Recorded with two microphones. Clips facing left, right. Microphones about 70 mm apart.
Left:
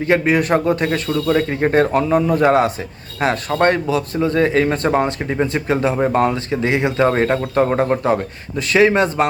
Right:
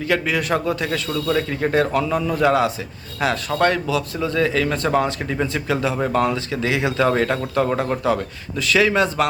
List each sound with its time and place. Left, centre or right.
0.0 s speech: left